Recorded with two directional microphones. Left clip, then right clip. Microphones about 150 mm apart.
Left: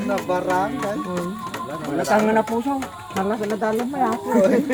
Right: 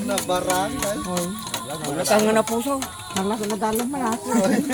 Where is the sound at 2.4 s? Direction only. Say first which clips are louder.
Even; 45° right (ahead or behind).